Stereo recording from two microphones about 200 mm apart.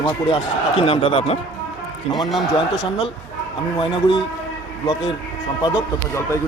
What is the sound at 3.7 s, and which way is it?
Speech, 25° left (ahead or behind).